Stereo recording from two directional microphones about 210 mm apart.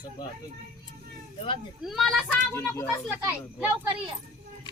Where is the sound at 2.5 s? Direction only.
10° left (ahead or behind).